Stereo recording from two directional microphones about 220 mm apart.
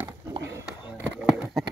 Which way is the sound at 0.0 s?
15° right (ahead or behind).